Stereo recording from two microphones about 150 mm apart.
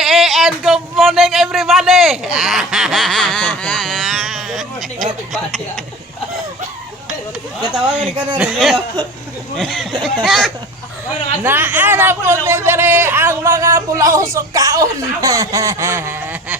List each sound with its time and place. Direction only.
0.0 s a sound: centre (ahead or behind)
7.7 s speech: 5° right (ahead or behind)
11.4 s speech: 10° right (ahead or behind)